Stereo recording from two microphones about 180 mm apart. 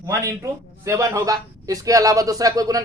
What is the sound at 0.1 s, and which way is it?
A man's voice, 15° right (ahead or behind).